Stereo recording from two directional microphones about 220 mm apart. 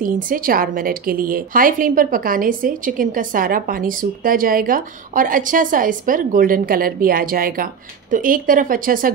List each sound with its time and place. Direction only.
0.0 s a woman's voice: 40° right (ahead or behind)